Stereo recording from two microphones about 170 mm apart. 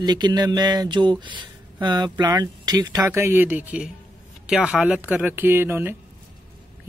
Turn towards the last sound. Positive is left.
turn(degrees=-10)  # may be behind; listen again after turning